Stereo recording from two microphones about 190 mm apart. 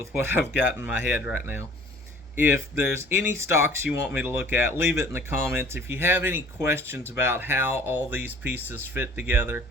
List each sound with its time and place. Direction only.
0.1 s speech: 10° right (ahead or behind)